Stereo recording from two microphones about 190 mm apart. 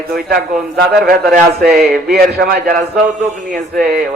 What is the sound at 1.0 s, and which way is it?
Speech, 50° right (ahead or behind).